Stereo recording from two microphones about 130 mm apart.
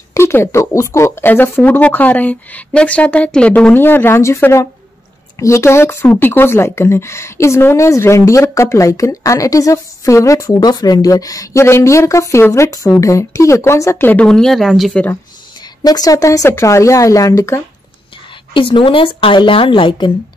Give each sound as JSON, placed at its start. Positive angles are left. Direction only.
{"t": 0.1, "sound": "speech", "side_deg": 20}
{"t": 15.8, "sound": "speech", "side_deg": 30}
{"t": 18.5, "sound": "speech", "side_deg": 40}